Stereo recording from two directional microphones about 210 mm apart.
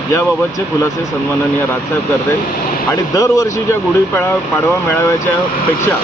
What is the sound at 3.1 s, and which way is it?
Speech, 15° left (ahead or behind).